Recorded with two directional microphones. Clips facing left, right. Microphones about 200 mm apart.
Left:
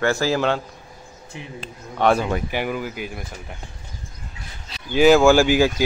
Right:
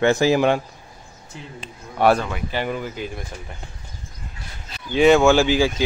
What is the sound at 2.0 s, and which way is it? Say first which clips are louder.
Speech: right 1 dB; 10° right (ahead or behind).